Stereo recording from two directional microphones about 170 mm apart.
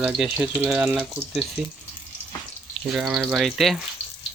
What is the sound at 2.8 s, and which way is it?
Speech, centre (ahead or behind).